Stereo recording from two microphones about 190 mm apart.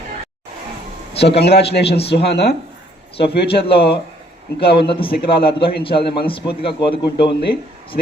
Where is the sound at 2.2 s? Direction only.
60° left (ahead or behind).